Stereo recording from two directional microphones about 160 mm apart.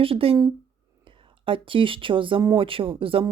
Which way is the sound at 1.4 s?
35° right (ahead or behind).